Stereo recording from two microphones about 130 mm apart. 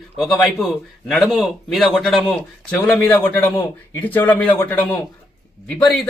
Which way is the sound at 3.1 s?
15° left (ahead or behind).